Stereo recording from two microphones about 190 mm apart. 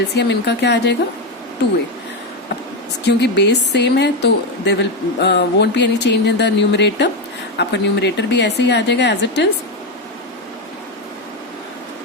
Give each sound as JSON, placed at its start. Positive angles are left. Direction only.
{"t": 0.1, "sound": "a woman's voice", "side_deg": 65}
{"t": 3.1, "sound": "a woman's voice", "side_deg": 65}